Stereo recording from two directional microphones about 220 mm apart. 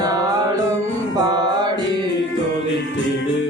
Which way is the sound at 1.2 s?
20° right (ahead or behind).